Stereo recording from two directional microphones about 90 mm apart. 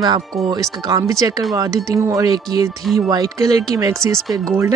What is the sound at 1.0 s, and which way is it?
Speech, 35° right (ahead or behind).